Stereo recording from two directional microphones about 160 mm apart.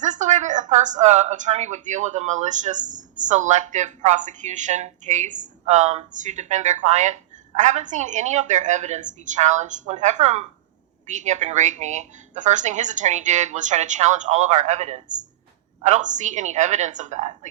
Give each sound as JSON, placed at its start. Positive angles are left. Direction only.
{"t": 0.0, "sound": "a woman's voice", "side_deg": -50}